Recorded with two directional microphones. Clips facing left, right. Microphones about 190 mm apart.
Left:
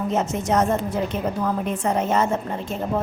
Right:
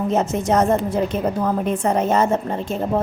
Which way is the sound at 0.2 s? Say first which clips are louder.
Right 2 dB; 35° right (ahead or behind).